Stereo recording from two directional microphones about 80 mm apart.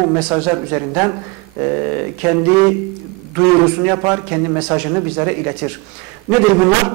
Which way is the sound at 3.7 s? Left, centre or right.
Centre.